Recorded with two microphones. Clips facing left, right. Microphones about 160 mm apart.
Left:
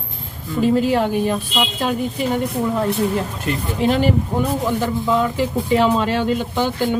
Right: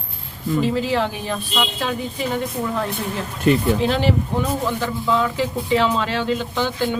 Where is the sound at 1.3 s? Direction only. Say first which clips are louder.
Left 3 dB; 15° left (ahead or behind).